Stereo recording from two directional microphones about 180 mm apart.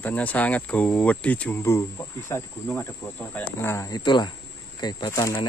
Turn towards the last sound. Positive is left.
turn(degrees=20)  # may be behind; listen again after turning